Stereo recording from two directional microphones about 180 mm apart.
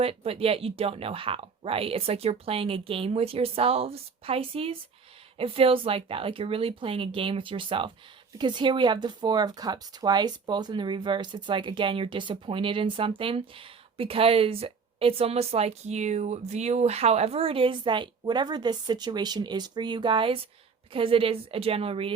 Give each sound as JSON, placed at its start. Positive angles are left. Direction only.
{"t": 0.0, "sound": "a woman's voice", "side_deg": -35}